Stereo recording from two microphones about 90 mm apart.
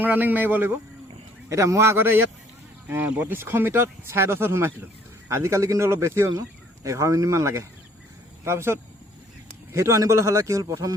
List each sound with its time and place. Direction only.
0.0 s speech: 20° right (ahead or behind)
1.5 s a man's voice: 35° right (ahead or behind)